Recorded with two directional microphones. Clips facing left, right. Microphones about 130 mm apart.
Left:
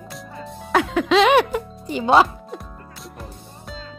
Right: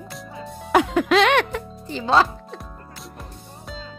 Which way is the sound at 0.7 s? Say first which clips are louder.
Right 1 dB; 10° right (ahead or behind).